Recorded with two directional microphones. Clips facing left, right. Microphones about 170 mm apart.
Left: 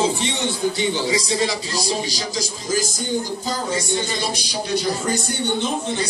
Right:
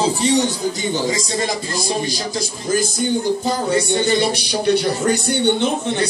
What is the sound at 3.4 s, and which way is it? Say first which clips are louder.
Speech: right 6 dB; 60° right (ahead or behind).